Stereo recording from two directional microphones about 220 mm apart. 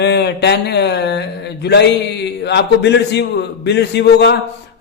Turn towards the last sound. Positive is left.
turn(degrees=50)  # may be behind; listen again after turning